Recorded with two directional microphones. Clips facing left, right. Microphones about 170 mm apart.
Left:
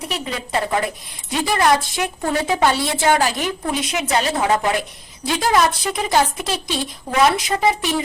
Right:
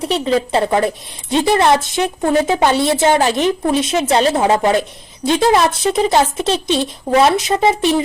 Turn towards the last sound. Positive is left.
turn(degrees=-25)  # may be behind; listen again after turning